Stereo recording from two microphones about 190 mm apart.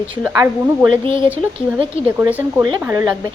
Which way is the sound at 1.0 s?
25° right (ahead or behind).